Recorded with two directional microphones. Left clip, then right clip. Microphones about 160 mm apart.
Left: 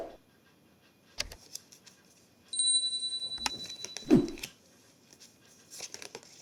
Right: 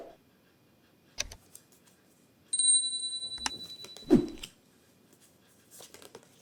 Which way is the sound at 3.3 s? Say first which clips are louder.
Left 1 dB; centre (ahead or behind).